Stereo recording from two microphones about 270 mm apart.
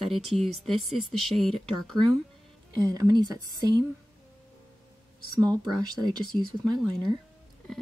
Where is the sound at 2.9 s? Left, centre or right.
Centre.